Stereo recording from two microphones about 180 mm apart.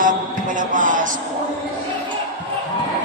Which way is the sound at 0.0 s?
45° right (ahead or behind).